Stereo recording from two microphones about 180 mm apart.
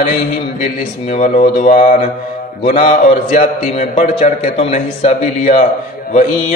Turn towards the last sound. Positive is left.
turn(degrees=45)  # may be behind; listen again after turning